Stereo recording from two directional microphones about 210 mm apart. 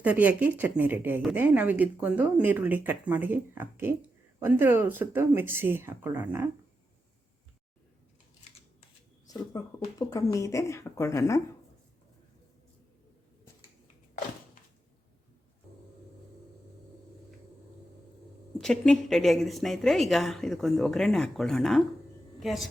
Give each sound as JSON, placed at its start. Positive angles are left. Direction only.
{"t": 0.0, "sound": "speech", "side_deg": -10}
{"t": 9.2, "sound": "speech", "side_deg": 15}
{"t": 18.6, "sound": "a woman's voice", "side_deg": 5}